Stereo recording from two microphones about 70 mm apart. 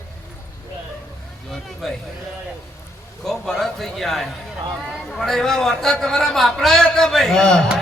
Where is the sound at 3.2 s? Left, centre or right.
Centre.